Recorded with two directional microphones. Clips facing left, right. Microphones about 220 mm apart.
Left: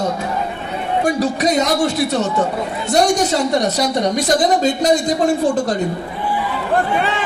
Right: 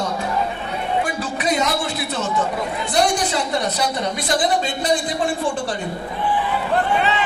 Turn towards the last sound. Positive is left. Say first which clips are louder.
# left 7 dB
turn(degrees=40)  # may be behind; listen again after turning